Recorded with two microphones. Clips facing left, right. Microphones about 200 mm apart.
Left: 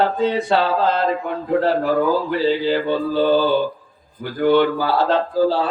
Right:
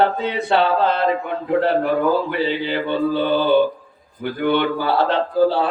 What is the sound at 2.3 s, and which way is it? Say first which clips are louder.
Speech: left 3 dB; 60° right (ahead or behind).